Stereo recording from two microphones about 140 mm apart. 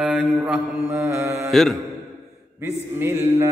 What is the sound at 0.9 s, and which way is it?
Mantra, 20° right (ahead or behind).